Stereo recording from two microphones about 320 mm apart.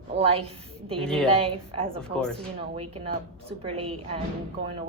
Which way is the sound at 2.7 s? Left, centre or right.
Centre.